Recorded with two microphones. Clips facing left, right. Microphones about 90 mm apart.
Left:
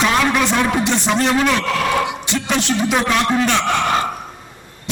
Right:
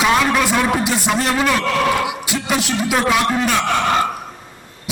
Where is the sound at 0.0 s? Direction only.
5° right (ahead or behind).